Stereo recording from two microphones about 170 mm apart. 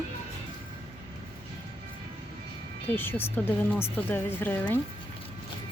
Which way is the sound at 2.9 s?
10° left (ahead or behind).